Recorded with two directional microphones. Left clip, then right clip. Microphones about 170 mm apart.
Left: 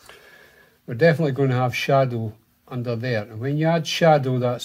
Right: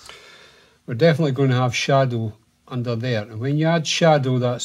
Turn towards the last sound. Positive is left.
turn(degrees=-15)  # may be behind; listen again after turning